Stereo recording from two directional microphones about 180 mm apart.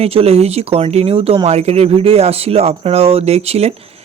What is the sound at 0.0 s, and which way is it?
Speech, 35° right (ahead or behind).